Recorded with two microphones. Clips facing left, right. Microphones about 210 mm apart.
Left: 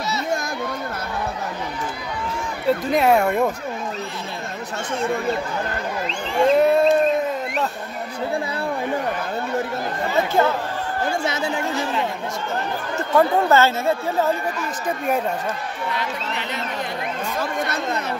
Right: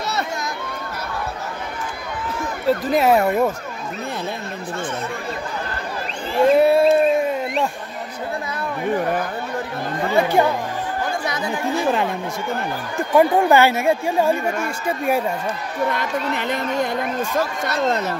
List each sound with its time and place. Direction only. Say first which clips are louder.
2.6 s speech: right 1 dB; centre (ahead or behind)
6.4 s a sound: right 2 dB; 5° right (ahead or behind)
10.1 s speech: right 2 dB; 15° right (ahead or behind)
11.2 s speech: left 1 dB; 25° left (ahead or behind)
12.9 s speech: right 2 dB; 15° right (ahead or behind)
15.9 s speech: right 4 dB; 50° right (ahead or behind)